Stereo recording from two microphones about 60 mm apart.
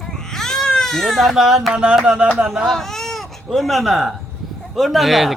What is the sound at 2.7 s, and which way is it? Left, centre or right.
Speech, centre.